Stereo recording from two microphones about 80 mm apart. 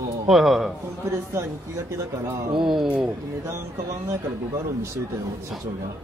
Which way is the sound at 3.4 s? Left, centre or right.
Right.